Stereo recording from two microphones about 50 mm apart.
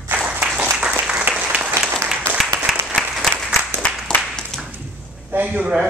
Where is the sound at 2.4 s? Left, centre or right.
Centre.